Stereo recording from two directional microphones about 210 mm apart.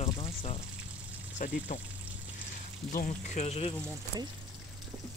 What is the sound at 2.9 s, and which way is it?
Speech, 35° left (ahead or behind).